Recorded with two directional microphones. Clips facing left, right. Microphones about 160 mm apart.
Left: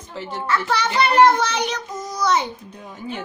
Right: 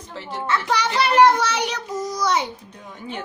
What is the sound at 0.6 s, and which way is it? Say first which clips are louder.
A child's voice: left 1 dB; 10° right (ahead or behind).